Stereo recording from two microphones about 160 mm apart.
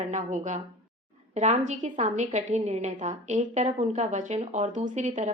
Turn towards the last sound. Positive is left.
turn(degrees=-45)  # may be behind; listen again after turning